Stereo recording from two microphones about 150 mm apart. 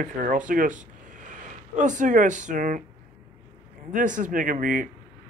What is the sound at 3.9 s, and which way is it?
Speech, 60° right (ahead or behind).